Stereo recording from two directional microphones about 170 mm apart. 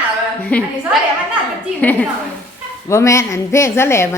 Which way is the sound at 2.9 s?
15° left (ahead or behind).